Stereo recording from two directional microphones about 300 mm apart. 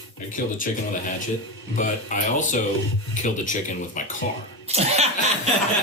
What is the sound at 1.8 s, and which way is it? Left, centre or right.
Speech, left.